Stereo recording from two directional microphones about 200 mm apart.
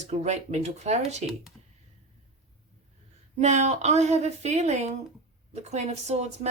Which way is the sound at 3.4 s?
35° right (ahead or behind).